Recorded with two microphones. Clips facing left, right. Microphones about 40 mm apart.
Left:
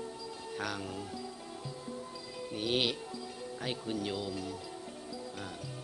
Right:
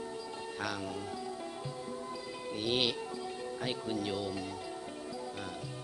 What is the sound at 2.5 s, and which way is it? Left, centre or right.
Speech, centre.